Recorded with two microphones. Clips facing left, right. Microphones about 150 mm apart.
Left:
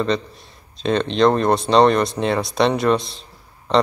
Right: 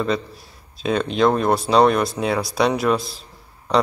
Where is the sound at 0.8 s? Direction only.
5° right (ahead or behind).